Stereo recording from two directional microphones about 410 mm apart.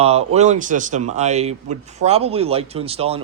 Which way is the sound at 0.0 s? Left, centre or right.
Centre.